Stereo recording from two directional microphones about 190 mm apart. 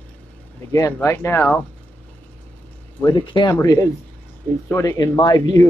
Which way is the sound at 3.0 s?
25° left (ahead or behind).